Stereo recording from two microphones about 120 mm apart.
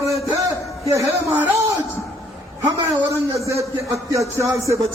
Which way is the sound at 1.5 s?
25° right (ahead or behind).